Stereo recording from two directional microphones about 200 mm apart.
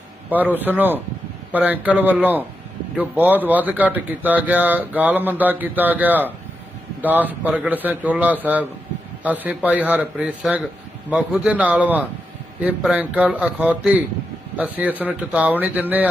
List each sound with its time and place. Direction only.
0.3 s a man's voice: 10° right (ahead or behind)